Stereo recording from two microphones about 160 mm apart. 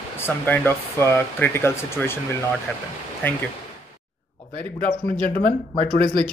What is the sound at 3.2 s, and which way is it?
Speech, 15° left (ahead or behind).